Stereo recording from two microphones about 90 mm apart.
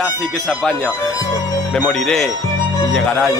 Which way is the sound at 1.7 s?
5° left (ahead or behind).